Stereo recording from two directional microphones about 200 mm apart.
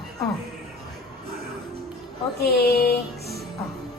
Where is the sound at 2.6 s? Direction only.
50° left (ahead or behind).